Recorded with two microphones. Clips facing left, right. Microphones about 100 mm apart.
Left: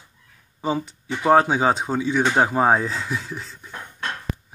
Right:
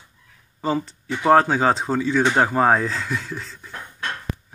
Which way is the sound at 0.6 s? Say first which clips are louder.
Right 1 dB; 15° left (ahead or behind).